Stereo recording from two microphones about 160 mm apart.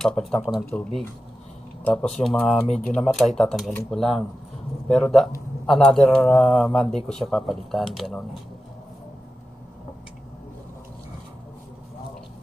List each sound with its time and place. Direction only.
0.0 s speech: 5° left (ahead or behind)